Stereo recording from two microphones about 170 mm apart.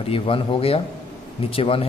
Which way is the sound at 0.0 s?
35° left (ahead or behind).